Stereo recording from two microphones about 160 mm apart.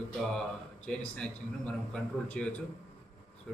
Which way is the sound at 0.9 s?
5° left (ahead or behind).